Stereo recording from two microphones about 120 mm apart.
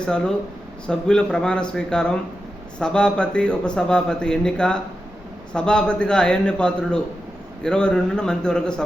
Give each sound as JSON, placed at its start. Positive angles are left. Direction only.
{"t": 0.0, "sound": "a man's voice", "side_deg": 5}